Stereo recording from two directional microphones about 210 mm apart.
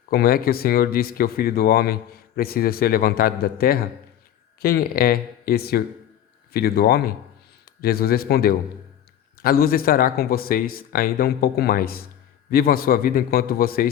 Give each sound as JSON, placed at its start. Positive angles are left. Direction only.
{"t": 0.1, "sound": "speech", "side_deg": 45}